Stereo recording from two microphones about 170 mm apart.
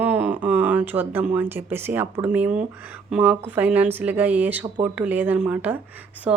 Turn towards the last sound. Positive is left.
turn(degrees=-5)  # may be behind; listen again after turning